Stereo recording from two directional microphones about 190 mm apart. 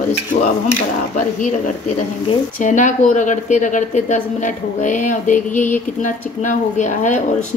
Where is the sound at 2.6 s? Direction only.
40° left (ahead or behind).